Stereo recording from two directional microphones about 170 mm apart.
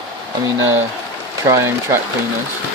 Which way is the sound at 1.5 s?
15° right (ahead or behind).